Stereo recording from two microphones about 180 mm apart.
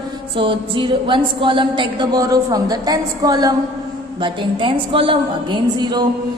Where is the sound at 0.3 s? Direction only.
30° right (ahead or behind).